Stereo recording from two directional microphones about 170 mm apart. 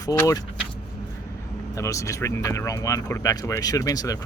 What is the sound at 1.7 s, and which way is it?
Speech, 20° left (ahead or behind).